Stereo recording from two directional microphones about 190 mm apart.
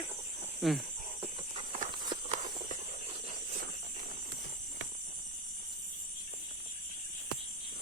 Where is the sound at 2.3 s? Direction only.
40° right (ahead or behind).